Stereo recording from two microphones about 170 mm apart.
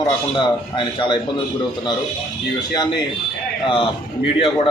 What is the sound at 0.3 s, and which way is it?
Speech, 30° left (ahead or behind).